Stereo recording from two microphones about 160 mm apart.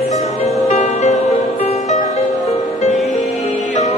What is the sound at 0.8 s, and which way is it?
Music, 45° left (ahead or behind).